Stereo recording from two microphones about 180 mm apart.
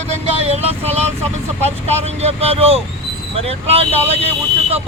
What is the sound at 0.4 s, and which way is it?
Vehicle, 35° right (ahead or behind).